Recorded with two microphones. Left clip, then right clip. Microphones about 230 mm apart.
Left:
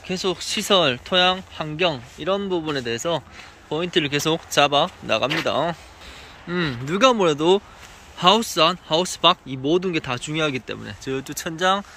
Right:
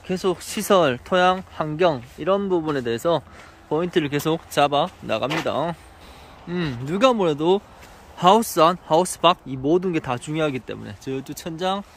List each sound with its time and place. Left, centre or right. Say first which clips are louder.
0.0 s speech: right 1 dB; centre